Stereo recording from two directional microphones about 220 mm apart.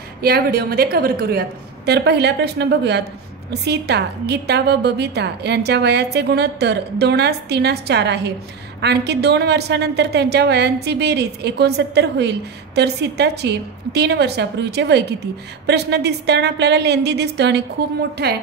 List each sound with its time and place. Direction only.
0.2 s a woman's voice: 45° right (ahead or behind)